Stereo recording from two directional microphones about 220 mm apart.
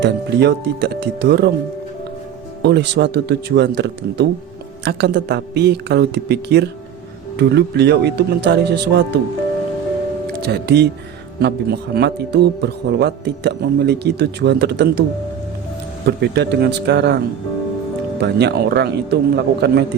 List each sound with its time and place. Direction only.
0.0 s a man's voice: 50° right (ahead or behind)
2.6 s a man's voice: 50° right (ahead or behind)
10.4 s a man's voice: 50° right (ahead or behind)
16.0 s a man's voice: 50° right (ahead or behind)
18.2 s a man's voice: 50° right (ahead or behind)